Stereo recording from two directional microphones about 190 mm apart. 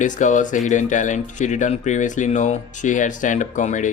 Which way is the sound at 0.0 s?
40° left (ahead or behind).